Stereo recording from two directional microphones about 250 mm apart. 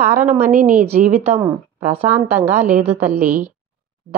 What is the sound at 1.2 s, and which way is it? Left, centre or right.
A woman's voice, centre.